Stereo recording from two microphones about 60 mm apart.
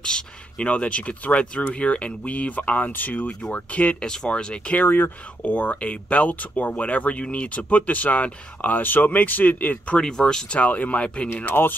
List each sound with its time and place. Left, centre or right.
0.0 s speech: centre
4.7 s speech: left
9.9 s speech: centre
11.6 s speech: left